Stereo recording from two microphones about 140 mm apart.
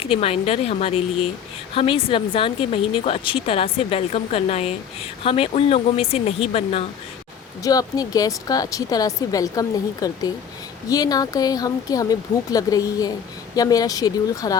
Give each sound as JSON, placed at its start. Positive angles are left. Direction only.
{"t": 0.0, "sound": "speech", "side_deg": 45}
{"t": 7.6, "sound": "speech", "side_deg": 25}